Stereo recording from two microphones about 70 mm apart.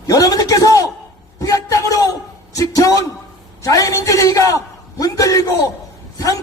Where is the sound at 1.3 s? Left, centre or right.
Left.